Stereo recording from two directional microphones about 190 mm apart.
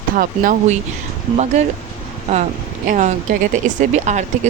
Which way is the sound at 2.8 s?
40° right (ahead or behind).